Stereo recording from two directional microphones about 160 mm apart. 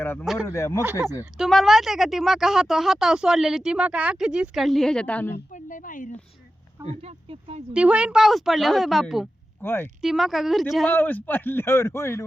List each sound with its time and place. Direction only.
0.0 s a man's voice: 10° left (ahead or behind)
1.4 s speech: centre (ahead or behind)
5.3 s speech: 55° left (ahead or behind)
6.8 s speech: 40° right (ahead or behind)
7.7 s speech: 5° right (ahead or behind)
9.6 s a man's voice: 15° left (ahead or behind)
10.0 s speech: centre (ahead or behind)
10.9 s a man's voice: 10° left (ahead or behind)